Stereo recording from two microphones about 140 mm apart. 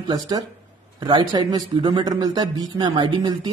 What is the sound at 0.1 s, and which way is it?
Speech, 25° right (ahead or behind).